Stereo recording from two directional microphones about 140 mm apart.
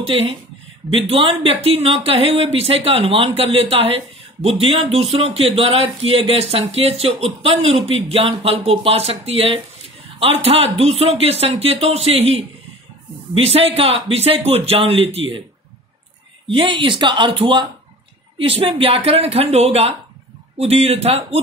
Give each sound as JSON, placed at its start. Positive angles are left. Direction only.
{"t": 0.1, "sound": "speech", "side_deg": -40}
{"t": 16.4, "sound": "speech", "side_deg": -40}